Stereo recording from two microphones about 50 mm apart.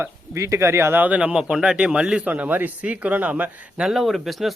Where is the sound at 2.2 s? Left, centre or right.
Right.